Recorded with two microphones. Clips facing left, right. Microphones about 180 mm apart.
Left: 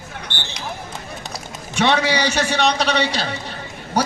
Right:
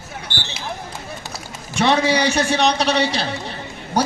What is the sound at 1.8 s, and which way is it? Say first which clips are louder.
A man's voice: right 1 dB; 5° right (ahead or behind).